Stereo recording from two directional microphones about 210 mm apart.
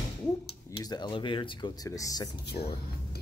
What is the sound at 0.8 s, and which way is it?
Speech, 20° left (ahead or behind).